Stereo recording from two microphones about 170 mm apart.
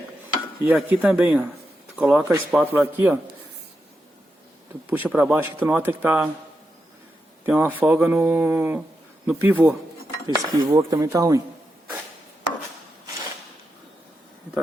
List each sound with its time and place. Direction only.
0.6 s speech: 10° right (ahead or behind)
4.9 s speech: 10° right (ahead or behind)
7.4 s speech: 10° right (ahead or behind)
10.2 s speech: 20° right (ahead or behind)